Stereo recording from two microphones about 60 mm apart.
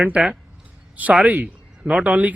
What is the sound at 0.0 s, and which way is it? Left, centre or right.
A man's voice, right.